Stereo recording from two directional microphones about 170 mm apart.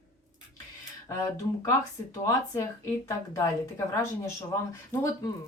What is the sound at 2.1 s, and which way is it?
Speech, 20° left (ahead or behind).